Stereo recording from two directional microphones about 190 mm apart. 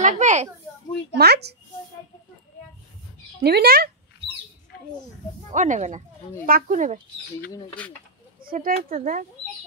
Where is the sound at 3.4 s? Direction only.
55° right (ahead or behind).